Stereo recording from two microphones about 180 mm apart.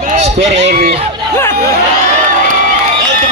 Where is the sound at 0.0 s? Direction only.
40° right (ahead or behind).